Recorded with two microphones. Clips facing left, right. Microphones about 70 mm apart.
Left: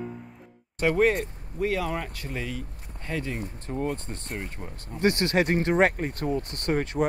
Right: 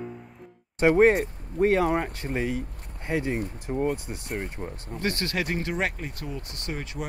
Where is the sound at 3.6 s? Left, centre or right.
Centre.